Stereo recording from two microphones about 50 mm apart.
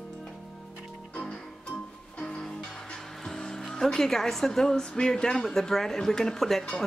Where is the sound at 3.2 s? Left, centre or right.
Centre.